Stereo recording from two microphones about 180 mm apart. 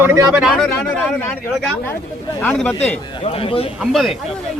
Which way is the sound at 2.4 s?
10° left (ahead or behind).